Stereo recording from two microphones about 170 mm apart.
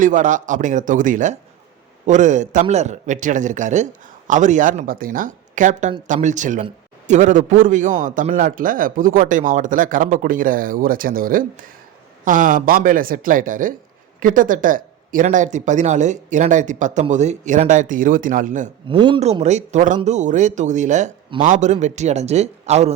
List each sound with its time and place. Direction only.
0.0 s speech: 50° right (ahead or behind)
18.9 s speech: 30° right (ahead or behind)
19.2 s a man's voice: 40° right (ahead or behind)